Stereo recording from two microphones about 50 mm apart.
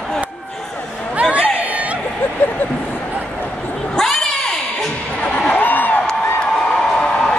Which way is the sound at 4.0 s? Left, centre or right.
Centre.